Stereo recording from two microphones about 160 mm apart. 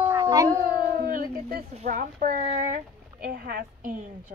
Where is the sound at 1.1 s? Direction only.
65° right (ahead or behind).